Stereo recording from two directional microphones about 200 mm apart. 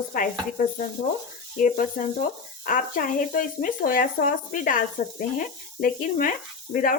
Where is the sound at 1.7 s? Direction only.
40° left (ahead or behind).